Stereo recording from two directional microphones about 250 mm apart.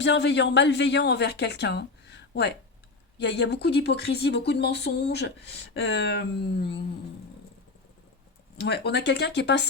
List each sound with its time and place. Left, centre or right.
0.0 s speech: left
8.5 s speech: left